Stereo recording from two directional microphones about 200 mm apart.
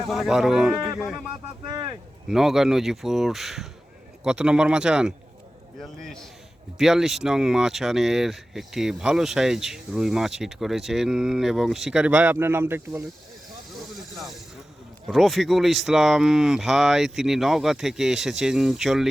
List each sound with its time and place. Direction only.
0.1 s speech: centre (ahead or behind)
1.6 s speech: 20° right (ahead or behind)
2.2 s speech: centre (ahead or behind)
15.0 s speech: centre (ahead or behind)